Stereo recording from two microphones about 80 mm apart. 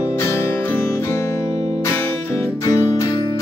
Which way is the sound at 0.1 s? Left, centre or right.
Left.